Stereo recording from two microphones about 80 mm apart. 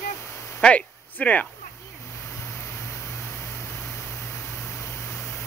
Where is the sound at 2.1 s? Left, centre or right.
Left.